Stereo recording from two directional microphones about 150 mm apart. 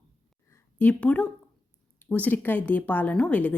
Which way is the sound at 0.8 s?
10° left (ahead or behind).